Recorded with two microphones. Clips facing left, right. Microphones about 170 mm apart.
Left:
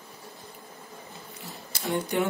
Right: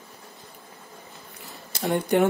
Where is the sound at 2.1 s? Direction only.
60° right (ahead or behind).